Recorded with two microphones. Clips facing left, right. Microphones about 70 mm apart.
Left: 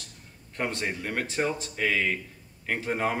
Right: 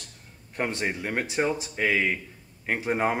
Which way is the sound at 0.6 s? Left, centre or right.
Centre.